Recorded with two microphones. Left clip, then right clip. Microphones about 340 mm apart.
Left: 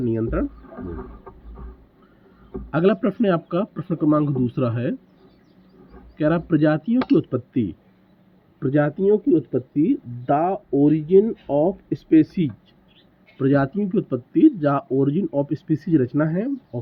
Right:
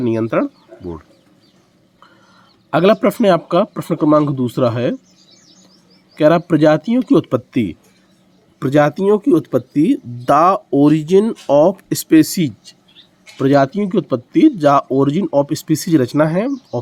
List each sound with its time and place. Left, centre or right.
0.0 s speech: centre
2.6 s speech: centre
6.1 s speech: centre
13.4 s speech: centre